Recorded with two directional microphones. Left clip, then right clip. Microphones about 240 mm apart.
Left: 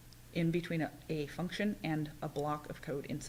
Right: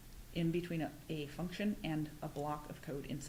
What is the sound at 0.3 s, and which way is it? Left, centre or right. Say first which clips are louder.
Speech: left 3 dB; left.